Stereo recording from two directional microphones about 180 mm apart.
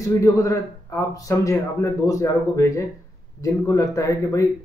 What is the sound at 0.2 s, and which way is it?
A man's voice, 15° left (ahead or behind).